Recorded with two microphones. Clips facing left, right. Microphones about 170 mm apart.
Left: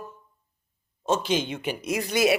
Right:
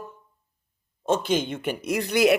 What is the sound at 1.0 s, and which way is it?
A man's voice, 55° right (ahead or behind).